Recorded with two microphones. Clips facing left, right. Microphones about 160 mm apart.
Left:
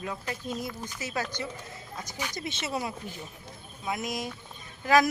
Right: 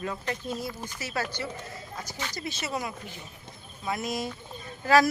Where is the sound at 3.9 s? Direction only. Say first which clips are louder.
Right 2 dB; 15° left (ahead or behind).